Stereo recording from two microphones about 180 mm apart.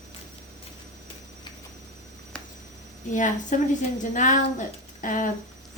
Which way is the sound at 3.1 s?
45° left (ahead or behind).